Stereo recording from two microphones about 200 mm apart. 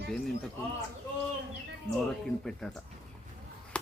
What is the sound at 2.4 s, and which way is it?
Speech, 5° left (ahead or behind).